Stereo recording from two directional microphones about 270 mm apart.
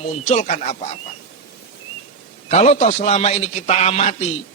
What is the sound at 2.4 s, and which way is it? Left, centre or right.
A man's voice, left.